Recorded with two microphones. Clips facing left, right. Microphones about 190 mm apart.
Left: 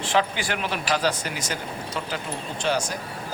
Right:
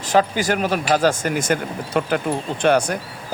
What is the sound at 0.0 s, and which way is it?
Speech, 40° right (ahead or behind).